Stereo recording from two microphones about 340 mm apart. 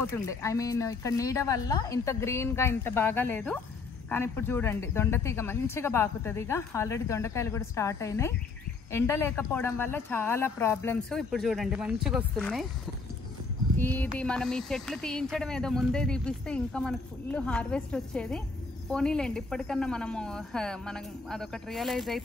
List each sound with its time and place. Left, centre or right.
0.0 s speech: centre
13.7 s speech: centre